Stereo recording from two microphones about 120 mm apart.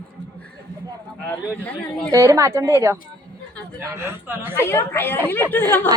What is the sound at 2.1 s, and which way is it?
A woman's voice, 25° right (ahead or behind).